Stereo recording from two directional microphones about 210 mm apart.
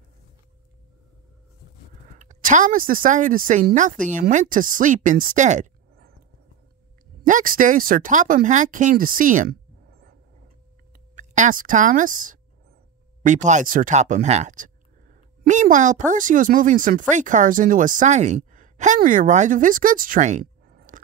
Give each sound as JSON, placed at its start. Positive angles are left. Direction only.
{"t": 2.1, "sound": "speech", "side_deg": -35}
{"t": 7.2, "sound": "speech", "side_deg": -40}
{"t": 11.1, "sound": "a woman's voice", "side_deg": -35}